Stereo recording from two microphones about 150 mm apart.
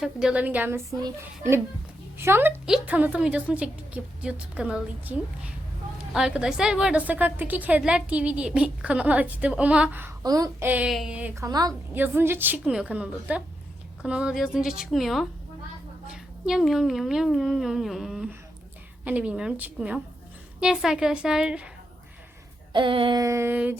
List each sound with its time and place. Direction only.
0.0 s a woman's voice: 5° right (ahead or behind)
10.2 s a woman's voice: 25° right (ahead or behind)
10.7 s a woman's voice: 10° right (ahead or behind)
11.3 s a woman's voice: 25° right (ahead or behind)
11.9 s a woman's voice: 15° right (ahead or behind)
22.7 s a sound: 35° right (ahead or behind)
23.2 s a woman's voice: 20° right (ahead or behind)